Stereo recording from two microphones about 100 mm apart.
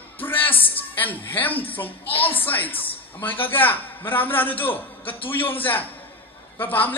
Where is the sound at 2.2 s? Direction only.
20° left (ahead or behind).